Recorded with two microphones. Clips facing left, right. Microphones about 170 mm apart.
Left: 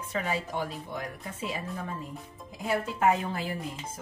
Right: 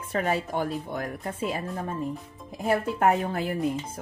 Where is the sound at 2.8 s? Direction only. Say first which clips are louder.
Right 3 dB; 55° right (ahead or behind).